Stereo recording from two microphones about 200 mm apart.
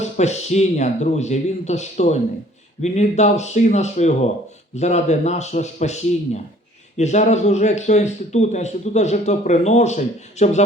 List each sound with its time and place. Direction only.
0.0 s speech: 35° left (ahead or behind)